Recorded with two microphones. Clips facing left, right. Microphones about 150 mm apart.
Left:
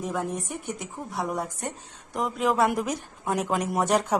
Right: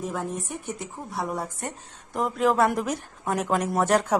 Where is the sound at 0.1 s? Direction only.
Centre (ahead or behind).